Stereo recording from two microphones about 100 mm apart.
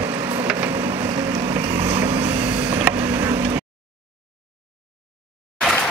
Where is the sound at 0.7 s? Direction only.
25° right (ahead or behind).